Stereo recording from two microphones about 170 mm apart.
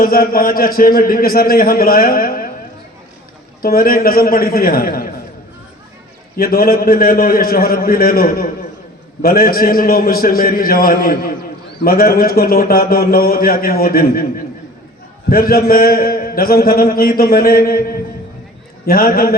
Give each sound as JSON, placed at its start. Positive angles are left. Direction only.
{"t": 0.0, "sound": "a man's voice", "side_deg": 60}
{"t": 3.6, "sound": "a man's voice", "side_deg": 60}
{"t": 6.3, "sound": "a man's voice", "side_deg": 60}
{"t": 15.3, "sound": "a man's voice", "side_deg": 60}
{"t": 18.9, "sound": "a man's voice", "side_deg": 60}